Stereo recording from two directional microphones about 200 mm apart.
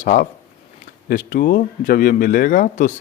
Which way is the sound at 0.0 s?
40° left (ahead or behind).